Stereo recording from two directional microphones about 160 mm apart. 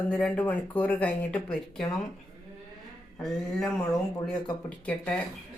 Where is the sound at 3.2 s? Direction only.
Centre (ahead or behind).